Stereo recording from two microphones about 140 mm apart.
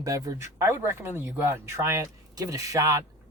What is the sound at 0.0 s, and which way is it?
Speech, 25° right (ahead or behind).